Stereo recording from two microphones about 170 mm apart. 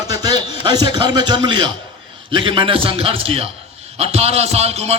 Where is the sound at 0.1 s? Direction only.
25° right (ahead or behind).